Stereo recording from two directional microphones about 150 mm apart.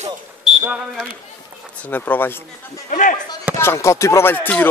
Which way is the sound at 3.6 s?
20° left (ahead or behind).